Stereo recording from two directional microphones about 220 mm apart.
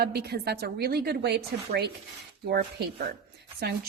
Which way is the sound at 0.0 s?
45° right (ahead or behind).